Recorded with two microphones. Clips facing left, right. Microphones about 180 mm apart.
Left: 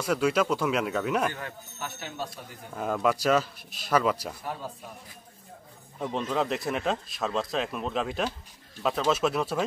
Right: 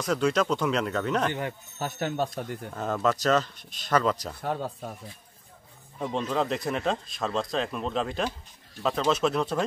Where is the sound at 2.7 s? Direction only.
10° left (ahead or behind).